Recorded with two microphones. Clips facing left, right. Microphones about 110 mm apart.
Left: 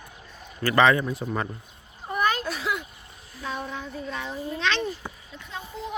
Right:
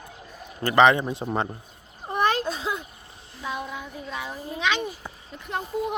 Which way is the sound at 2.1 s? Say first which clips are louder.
Right 2 dB; 25° right (ahead or behind).